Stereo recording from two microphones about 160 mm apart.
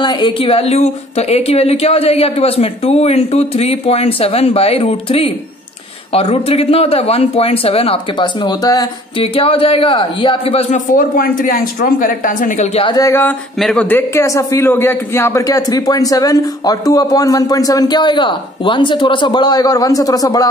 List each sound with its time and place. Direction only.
0.0 s a woman's voice: 30° left (ahead or behind)
9.2 s a woman's voice: 35° left (ahead or behind)
11.0 s speech: 60° left (ahead or behind)
12.7 s a woman's voice: 35° left (ahead or behind)
13.0 s speech: 15° left (ahead or behind)
13.6 s a man's voice: 5° left (ahead or behind); by 20.4 s 20° left (ahead or behind)